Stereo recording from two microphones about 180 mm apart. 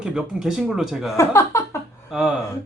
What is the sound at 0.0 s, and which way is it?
Speech, 5° right (ahead or behind).